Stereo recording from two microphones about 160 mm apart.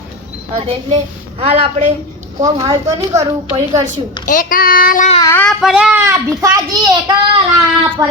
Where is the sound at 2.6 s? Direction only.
20° right (ahead or behind).